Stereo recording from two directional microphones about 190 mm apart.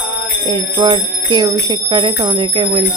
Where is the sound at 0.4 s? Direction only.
25° right (ahead or behind).